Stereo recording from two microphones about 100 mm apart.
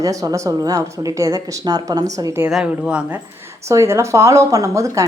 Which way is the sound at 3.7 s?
30° right (ahead or behind).